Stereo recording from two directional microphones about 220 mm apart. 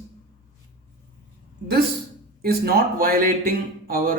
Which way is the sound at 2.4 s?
45° right (ahead or behind).